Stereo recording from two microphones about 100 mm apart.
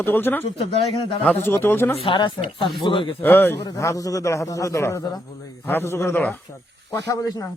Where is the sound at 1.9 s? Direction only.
60° left (ahead or behind).